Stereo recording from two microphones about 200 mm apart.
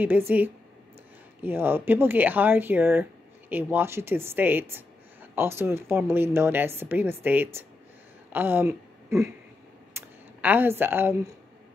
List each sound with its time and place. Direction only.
0.1 s speech: 10° right (ahead or behind)
1.4 s speech: 10° right (ahead or behind)
9.9 s a sound: 10° right (ahead or behind)